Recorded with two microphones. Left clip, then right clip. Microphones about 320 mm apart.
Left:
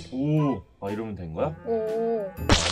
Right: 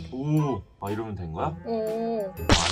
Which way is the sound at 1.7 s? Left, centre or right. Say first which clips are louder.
Left 2 dB; right.